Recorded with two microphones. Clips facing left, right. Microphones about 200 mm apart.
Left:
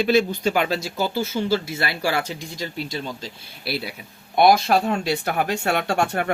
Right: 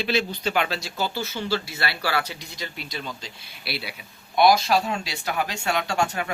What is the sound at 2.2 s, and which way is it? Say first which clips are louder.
Speech: left 5 dB; 45° left (ahead or behind).